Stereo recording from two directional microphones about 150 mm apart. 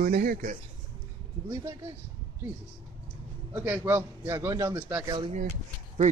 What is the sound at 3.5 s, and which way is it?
A man's voice, 15° right (ahead or behind).